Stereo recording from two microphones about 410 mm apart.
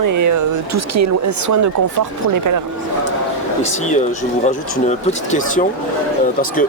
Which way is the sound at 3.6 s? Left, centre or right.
Centre.